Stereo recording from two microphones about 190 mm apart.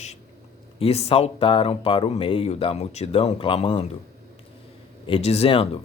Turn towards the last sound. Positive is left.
turn(degrees=30)  # may be behind; listen again after turning